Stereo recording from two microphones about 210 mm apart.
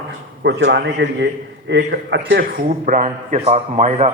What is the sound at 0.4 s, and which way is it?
A man's voice, 55° right (ahead or behind).